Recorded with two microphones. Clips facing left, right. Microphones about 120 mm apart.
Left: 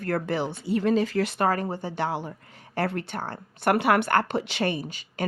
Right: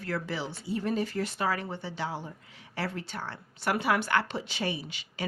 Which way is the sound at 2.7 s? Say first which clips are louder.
Left 7 dB; 55° left (ahead or behind).